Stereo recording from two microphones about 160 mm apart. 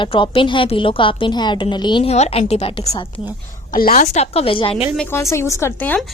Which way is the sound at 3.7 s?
65° left (ahead or behind).